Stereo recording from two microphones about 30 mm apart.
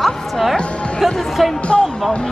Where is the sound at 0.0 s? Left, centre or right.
Centre.